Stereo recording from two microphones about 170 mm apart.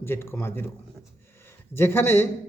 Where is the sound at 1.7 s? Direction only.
15° left (ahead or behind).